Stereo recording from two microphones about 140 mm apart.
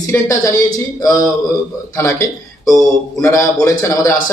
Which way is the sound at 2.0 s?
25° left (ahead or behind).